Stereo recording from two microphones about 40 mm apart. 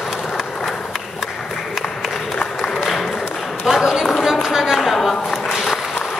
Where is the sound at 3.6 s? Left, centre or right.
Centre.